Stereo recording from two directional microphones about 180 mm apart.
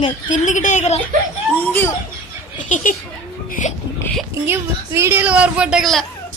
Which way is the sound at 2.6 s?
40° left (ahead or behind).